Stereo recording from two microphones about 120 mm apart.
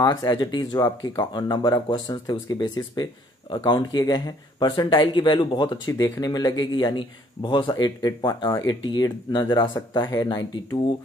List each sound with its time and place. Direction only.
0.0 s speech: 30° left (ahead or behind)
5.9 s speech: 25° left (ahead or behind)